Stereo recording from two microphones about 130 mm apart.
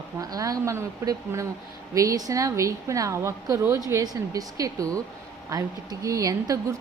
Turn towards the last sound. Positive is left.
turn(degrees=-25)  # may be behind; listen again after turning